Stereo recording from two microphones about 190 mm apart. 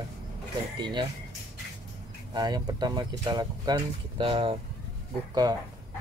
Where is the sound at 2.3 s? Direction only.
20° right (ahead or behind).